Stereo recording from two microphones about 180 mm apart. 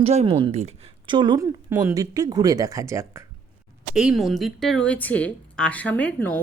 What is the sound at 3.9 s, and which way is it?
A woman's voice, 5° right (ahead or behind).